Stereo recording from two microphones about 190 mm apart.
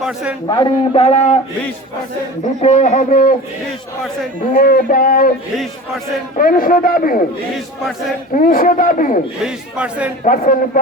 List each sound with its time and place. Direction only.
0.0 s a man's voice: 5° right (ahead or behind)
0.5 s a man's voice: 30° left (ahead or behind)
2.6 s speech: 40° left (ahead or behind)
4.5 s speech: 45° left (ahead or behind)
6.3 s speech: 45° left (ahead or behind)
8.4 s speech: 45° left (ahead or behind)
9.4 s a man's voice: 5° right (ahead or behind)
10.2 s speech: 45° left (ahead or behind)